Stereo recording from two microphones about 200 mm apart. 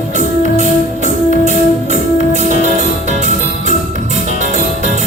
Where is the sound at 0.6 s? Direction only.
35° right (ahead or behind).